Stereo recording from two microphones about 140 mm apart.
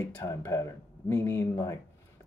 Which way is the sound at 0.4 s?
20° left (ahead or behind).